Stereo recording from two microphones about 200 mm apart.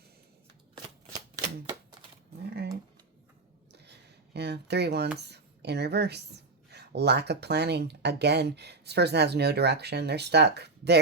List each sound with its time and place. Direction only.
4.4 s a woman's voice: 55° right (ahead or behind)